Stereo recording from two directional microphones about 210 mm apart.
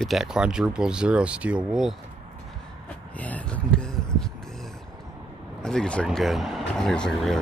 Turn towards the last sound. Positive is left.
turn(degrees=5)  # may be behind; listen again after turning